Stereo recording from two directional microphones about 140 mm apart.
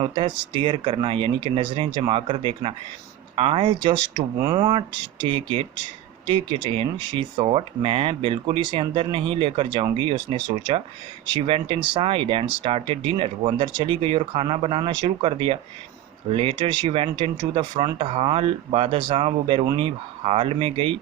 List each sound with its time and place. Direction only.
0.0 s speech: 35° right (ahead or behind)
4.4 s speech: 25° right (ahead or behind)
11.3 s speech: 40° right (ahead or behind)